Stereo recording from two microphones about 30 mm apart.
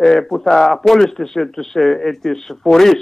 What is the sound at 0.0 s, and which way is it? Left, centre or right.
A man's voice, centre.